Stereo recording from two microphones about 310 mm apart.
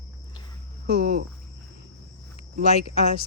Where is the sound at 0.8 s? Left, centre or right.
Right.